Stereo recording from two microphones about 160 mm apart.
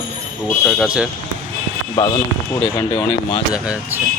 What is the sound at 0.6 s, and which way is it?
Speech, 5° right (ahead or behind).